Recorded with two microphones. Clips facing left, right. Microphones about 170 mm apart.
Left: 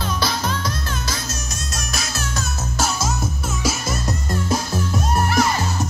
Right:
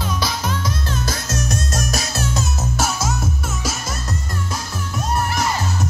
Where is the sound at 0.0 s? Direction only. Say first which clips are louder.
Left 1 dB; 15° right (ahead or behind).